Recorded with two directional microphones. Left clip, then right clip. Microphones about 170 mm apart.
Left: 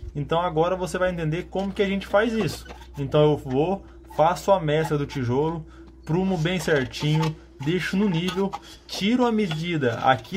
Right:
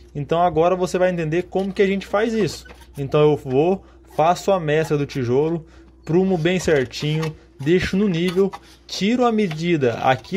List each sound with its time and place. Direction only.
0.3 s speech: 40° right (ahead or behind)